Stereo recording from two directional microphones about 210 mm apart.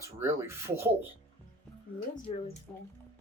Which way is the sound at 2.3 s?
25° left (ahead or behind).